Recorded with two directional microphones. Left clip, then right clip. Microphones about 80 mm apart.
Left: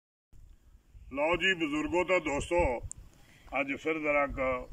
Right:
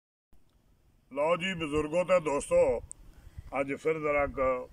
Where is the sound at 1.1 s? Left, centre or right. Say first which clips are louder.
Left 1 dB; right.